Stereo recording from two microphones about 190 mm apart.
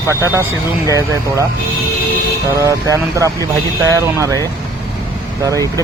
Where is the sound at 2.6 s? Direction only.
15° right (ahead or behind).